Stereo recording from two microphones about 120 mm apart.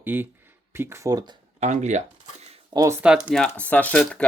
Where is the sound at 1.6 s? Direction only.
75° right (ahead or behind).